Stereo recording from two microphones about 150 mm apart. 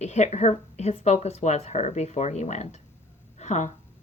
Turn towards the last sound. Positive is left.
turn(degrees=50)  # may be behind; listen again after turning